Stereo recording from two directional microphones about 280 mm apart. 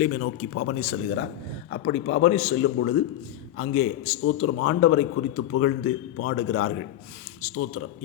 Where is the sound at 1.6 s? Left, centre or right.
Left.